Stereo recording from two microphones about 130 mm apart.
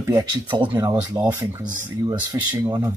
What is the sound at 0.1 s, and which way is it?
Speech, 35° right (ahead or behind).